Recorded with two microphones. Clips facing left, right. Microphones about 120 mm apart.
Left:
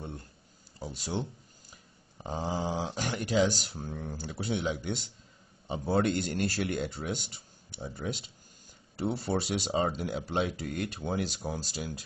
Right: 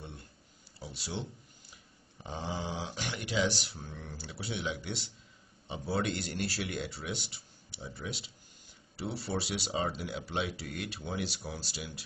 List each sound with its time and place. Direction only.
0.7 s speech: 45° left (ahead or behind)
2.2 s speech: 40° left (ahead or behind)